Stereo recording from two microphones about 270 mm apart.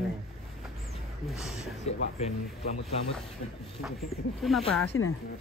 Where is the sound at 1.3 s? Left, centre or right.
Centre.